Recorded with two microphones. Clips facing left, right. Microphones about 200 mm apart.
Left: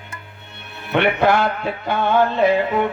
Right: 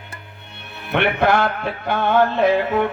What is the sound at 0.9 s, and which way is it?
Music, 55° right (ahead or behind).